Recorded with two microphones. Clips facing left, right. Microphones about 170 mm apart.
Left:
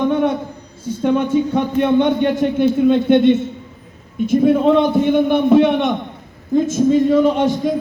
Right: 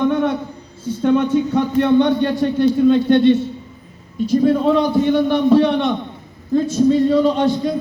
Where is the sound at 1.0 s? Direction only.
15° left (ahead or behind).